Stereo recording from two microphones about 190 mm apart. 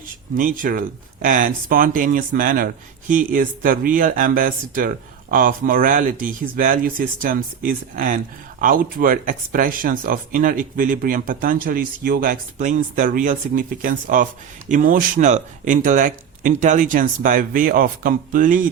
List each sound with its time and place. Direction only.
0.3 s speech: 45° right (ahead or behind)